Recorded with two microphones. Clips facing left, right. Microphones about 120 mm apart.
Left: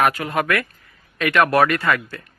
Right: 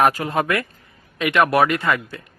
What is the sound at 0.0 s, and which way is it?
Speech, 30° right (ahead or behind).